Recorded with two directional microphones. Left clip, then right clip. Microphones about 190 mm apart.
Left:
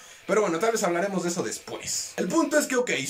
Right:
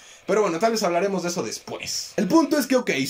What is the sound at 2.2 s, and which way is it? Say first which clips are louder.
Speech: right 3 dB; 25° right (ahead or behind).